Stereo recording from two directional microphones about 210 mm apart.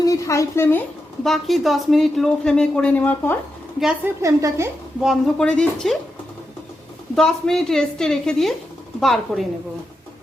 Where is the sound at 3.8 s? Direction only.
5° right (ahead or behind).